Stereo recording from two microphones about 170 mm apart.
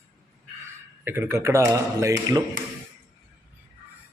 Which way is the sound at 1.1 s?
15° right (ahead or behind).